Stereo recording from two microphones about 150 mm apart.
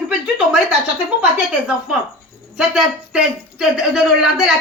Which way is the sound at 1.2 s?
5° right (ahead or behind).